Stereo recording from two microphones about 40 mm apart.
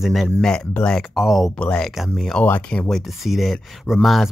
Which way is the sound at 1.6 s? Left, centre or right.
Left.